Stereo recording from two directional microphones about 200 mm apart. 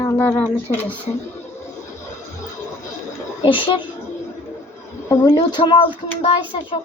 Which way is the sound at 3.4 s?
25° left (ahead or behind).